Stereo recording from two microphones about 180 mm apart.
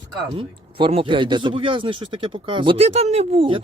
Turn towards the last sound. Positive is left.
turn(degrees=-30)  # may be behind; listen again after turning